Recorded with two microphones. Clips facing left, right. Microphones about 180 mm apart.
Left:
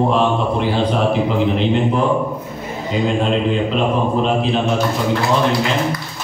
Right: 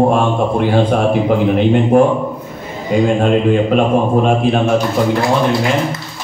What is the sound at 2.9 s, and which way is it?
Speech, 50° right (ahead or behind).